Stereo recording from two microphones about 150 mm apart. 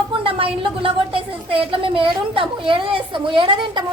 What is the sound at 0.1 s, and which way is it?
A woman's voice, 35° right (ahead or behind).